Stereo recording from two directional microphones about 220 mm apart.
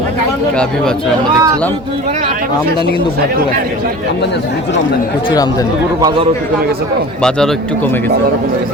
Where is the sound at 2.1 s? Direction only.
35° right (ahead or behind).